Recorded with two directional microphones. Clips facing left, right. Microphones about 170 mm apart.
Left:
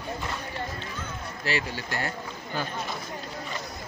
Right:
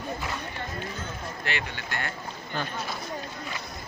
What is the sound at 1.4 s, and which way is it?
Speech, 35° left (ahead or behind).